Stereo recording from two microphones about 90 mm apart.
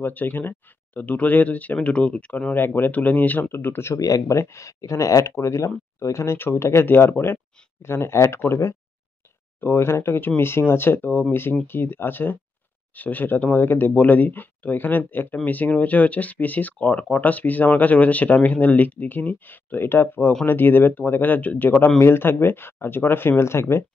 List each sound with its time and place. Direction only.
0.0 s speech: 20° left (ahead or behind)
4.0 s speech: 40° left (ahead or behind)